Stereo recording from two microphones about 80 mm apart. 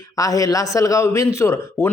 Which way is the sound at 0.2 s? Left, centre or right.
Left.